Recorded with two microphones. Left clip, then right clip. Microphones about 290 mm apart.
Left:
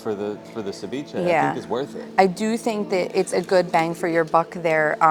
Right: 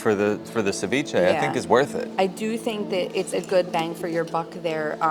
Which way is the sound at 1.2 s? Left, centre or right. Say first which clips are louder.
Left 4 dB; left.